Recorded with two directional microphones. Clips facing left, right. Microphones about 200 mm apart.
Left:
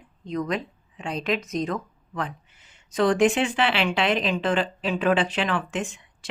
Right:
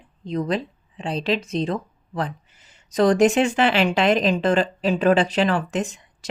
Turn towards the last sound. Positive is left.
turn(degrees=-40)  # may be behind; listen again after turning